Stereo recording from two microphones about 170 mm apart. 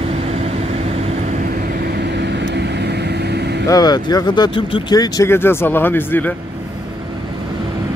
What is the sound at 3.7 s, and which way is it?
Speech, 25° left (ahead or behind).